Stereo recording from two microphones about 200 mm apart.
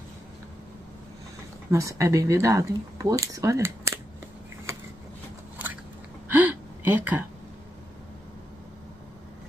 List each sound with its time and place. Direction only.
1.7 s speech: 15° right (ahead or behind)
6.2 s gasp: 10° right (ahead or behind)